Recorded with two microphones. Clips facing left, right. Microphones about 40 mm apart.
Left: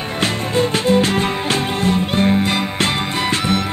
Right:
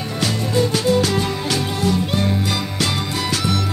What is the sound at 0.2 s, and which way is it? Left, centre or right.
Music, left.